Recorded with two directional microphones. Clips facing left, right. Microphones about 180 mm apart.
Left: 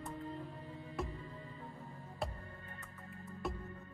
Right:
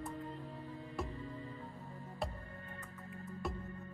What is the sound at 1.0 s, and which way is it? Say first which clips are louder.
Music: left 1 dB; centre (ahead or behind).